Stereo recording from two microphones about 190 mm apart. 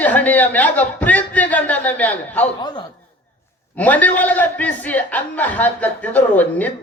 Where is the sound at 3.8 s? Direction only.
10° left (ahead or behind).